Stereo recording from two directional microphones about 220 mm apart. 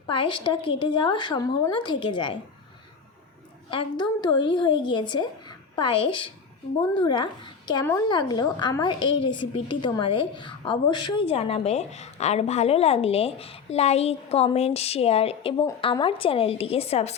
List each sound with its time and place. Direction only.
0.1 s a woman's voice: 20° left (ahead or behind)
3.7 s a woman's voice: 20° left (ahead or behind)